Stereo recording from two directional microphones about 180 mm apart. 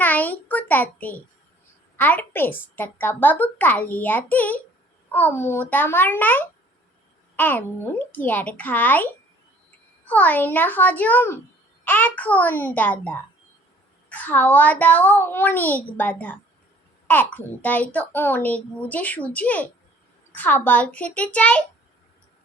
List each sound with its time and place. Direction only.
0.0 s a sound: 10° left (ahead or behind)
2.0 s a woman's voice: 10° left (ahead or behind)
10.1 s a woman's voice: 10° left (ahead or behind)